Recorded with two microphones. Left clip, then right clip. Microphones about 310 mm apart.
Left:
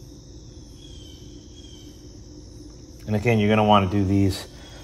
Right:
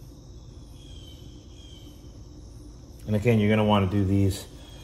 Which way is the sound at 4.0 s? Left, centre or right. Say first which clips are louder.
Left 4 dB; left.